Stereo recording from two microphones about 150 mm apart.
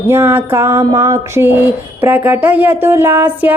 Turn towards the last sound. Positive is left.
turn(degrees=-10)  # may be behind; listen again after turning